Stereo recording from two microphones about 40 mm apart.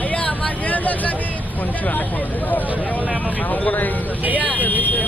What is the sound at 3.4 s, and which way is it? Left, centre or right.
Speech, left.